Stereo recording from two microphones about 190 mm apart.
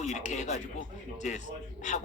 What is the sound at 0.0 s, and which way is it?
Speech, 40° left (ahead or behind).